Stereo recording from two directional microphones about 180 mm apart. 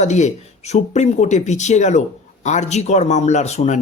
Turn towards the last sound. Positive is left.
turn(degrees=40)  # may be behind; listen again after turning